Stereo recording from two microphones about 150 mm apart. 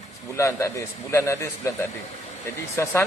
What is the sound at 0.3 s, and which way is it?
A man's voice, 20° left (ahead or behind).